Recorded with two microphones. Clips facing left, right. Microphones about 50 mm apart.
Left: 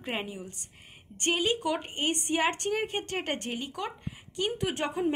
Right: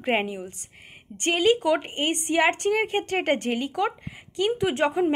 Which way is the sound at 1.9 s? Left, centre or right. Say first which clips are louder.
Right 4 dB; right.